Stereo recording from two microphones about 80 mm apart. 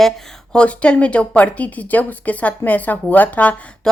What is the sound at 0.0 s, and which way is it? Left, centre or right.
A woman's voice, centre.